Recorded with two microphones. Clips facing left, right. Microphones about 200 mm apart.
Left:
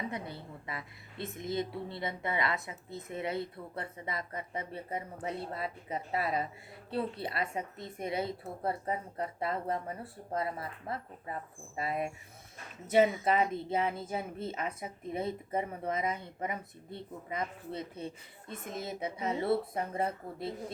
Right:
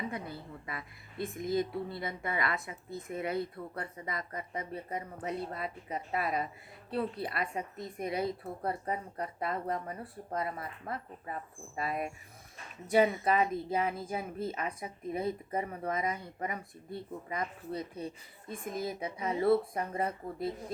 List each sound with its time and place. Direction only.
0.1 s a woman's voice: 25° left (ahead or behind)
13.7 s a woman's voice: 25° left (ahead or behind)